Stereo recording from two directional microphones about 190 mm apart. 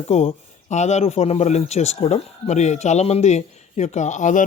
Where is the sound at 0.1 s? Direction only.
35° left (ahead or behind).